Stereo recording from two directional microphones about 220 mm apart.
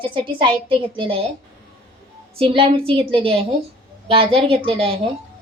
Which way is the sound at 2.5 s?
25° right (ahead or behind).